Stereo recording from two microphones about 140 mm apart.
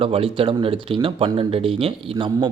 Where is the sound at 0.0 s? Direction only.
40° right (ahead or behind).